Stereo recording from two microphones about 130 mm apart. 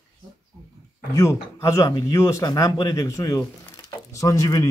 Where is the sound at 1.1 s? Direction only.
25° left (ahead or behind).